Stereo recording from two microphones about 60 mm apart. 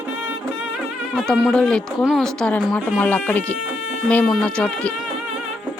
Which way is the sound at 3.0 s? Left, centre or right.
Left.